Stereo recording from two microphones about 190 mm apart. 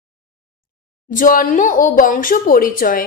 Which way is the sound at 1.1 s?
45° left (ahead or behind).